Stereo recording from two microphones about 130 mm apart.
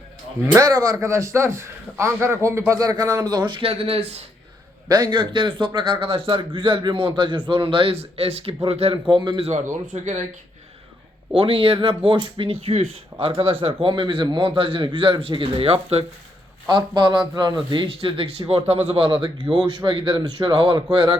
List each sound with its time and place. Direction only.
0.6 s a man's voice: 30° right (ahead or behind); by 4.3 s 50° right (ahead or behind)
4.9 s a man's voice: 35° right (ahead or behind)
9.8 s speech: 70° right (ahead or behind)
11.3 s speech: 40° right (ahead or behind)
16.6 s a man's voice: 35° right (ahead or behind)